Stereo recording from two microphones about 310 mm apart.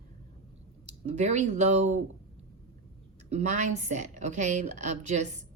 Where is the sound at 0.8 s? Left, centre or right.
Right.